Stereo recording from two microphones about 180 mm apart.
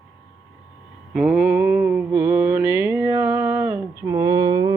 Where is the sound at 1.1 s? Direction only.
5° right (ahead or behind).